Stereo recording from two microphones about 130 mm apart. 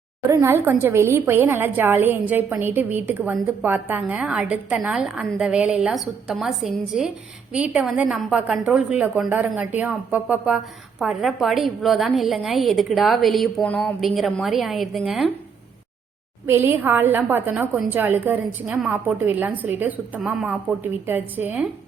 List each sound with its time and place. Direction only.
0.3 s a woman's voice: 20° right (ahead or behind); by 13.9 s 10° left (ahead or behind)
14.2 s a woman's voice: centre (ahead or behind)
16.5 s a woman's voice: 20° right (ahead or behind)